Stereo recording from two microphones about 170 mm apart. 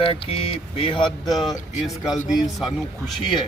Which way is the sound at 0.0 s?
30° left (ahead or behind).